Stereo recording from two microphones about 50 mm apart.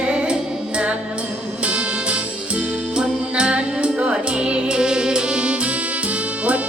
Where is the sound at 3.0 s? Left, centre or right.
Right.